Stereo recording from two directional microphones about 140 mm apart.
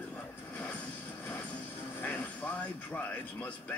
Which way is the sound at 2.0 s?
10° left (ahead or behind).